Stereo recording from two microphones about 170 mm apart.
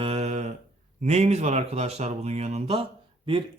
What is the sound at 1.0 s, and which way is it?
Speech, 40° right (ahead or behind).